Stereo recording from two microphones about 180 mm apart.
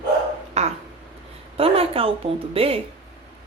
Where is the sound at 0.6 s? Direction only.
40° right (ahead or behind).